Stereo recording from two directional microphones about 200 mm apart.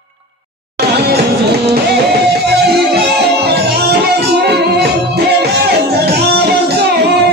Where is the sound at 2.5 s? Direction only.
55° right (ahead or behind).